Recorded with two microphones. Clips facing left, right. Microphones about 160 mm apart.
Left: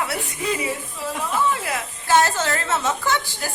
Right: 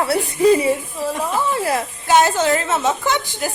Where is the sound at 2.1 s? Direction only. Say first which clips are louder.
Right 4 dB; 15° right (ahead or behind).